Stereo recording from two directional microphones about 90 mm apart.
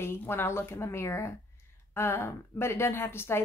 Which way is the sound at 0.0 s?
25° left (ahead or behind).